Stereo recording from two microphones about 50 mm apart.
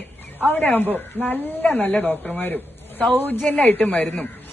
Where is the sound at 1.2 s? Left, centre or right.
Left.